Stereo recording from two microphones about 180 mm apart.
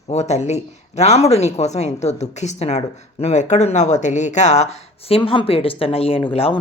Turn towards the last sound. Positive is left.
turn(degrees=30)  # may be behind; listen again after turning